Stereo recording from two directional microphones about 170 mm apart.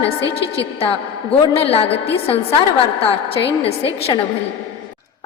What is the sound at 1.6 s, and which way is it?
Speech, 35° left (ahead or behind).